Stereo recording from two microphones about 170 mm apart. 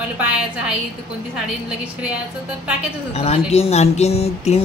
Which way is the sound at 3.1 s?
35° left (ahead or behind).